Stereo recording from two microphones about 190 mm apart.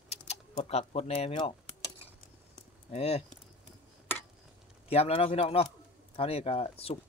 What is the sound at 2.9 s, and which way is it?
Speech, 30° left (ahead or behind).